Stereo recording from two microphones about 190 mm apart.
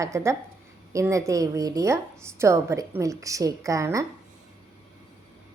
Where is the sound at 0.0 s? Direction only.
15° right (ahead or behind).